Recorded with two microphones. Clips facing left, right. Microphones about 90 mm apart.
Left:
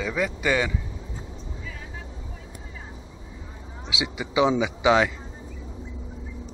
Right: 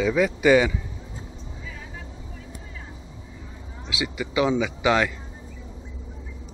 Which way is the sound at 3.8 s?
20° left (ahead or behind).